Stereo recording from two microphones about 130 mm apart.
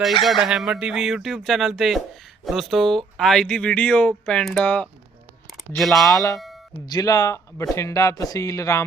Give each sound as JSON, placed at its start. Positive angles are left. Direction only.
{"t": 0.2, "sound": "speech", "side_deg": 0}
{"t": 5.7, "sound": "speech", "side_deg": 0}
{"t": 6.1, "sound": "speech", "side_deg": 25}